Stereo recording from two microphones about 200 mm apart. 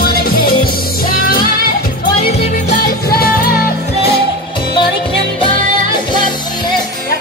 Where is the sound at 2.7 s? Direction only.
50° left (ahead or behind).